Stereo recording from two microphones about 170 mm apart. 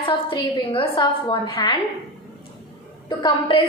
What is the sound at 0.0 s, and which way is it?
A woman's voice, 30° left (ahead or behind).